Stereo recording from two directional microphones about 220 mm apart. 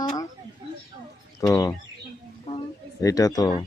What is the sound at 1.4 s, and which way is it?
Speech, 10° left (ahead or behind).